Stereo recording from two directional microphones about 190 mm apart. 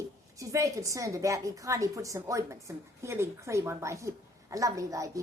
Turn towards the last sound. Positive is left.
turn(degrees=-15)  # may be behind; listen again after turning